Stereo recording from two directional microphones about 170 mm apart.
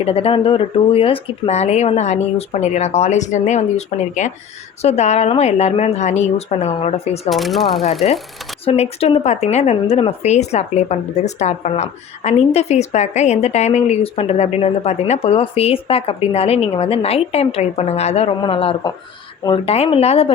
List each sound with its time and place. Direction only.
0.0 s speech: 35° left (ahead or behind)
7.3 s speech: centre (ahead or behind)
8.6 s speech: 35° left (ahead or behind)